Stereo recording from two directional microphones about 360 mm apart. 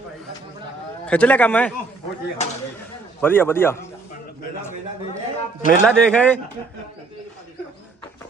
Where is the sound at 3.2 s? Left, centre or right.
Centre.